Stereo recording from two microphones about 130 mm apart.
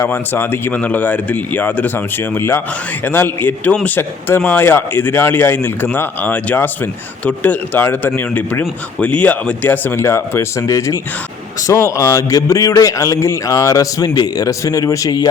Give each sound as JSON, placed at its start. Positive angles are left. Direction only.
{"t": 0.0, "sound": "a man's voice", "side_deg": 15}